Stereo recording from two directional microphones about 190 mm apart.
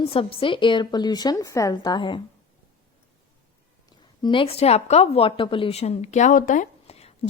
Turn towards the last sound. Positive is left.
turn(degrees=35)  # may be behind; listen again after turning